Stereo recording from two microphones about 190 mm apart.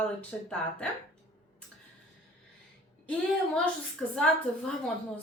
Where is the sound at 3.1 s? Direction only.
5° left (ahead or behind).